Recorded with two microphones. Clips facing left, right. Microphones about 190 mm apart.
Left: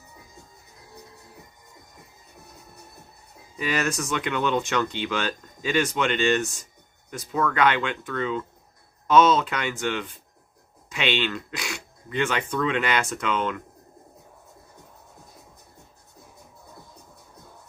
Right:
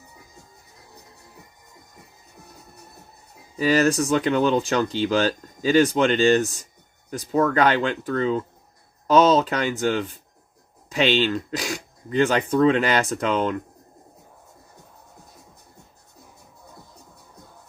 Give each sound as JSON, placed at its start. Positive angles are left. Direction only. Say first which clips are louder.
{"t": 3.6, "sound": "speech", "louder": "right 8 dB", "side_deg": -35}